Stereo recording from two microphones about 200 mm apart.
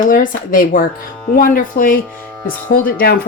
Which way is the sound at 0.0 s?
40° left (ahead or behind).